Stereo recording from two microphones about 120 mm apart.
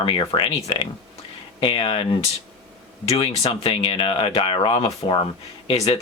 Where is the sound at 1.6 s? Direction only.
45° left (ahead or behind).